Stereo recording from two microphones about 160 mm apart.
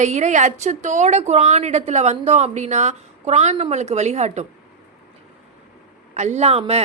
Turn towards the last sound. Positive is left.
turn(degrees=-40)  # may be behind; listen again after turning